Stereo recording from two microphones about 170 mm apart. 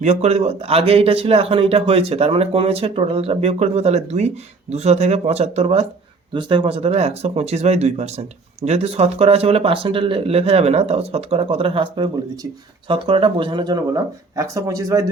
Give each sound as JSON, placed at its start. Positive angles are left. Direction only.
{"t": 0.0, "sound": "a man's voice", "side_deg": -40}